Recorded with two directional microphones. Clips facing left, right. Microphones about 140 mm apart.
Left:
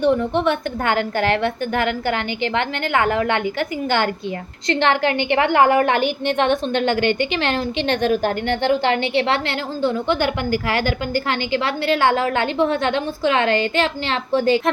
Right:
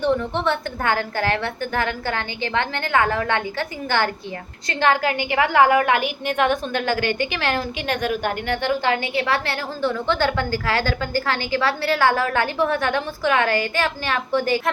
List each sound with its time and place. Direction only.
0.0 s a woman's voice: 15° left (ahead or behind)